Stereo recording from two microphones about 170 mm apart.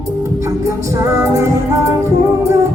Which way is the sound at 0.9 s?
20° right (ahead or behind).